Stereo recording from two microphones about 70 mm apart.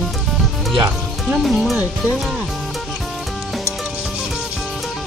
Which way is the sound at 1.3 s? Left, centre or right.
Centre.